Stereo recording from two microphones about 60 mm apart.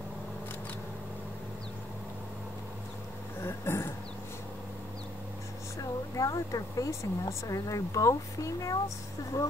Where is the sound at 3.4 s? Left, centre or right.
Left.